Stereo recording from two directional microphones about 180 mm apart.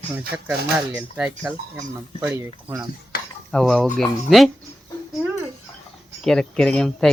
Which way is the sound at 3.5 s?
Centre (ahead or behind).